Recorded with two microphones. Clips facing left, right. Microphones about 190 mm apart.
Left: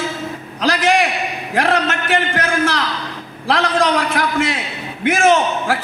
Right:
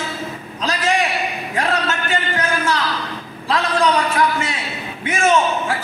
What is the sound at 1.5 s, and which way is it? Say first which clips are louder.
A man's voice: left 4 dB; 75° left (ahead or behind).